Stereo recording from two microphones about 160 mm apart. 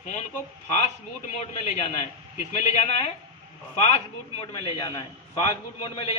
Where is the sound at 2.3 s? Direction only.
50° left (ahead or behind).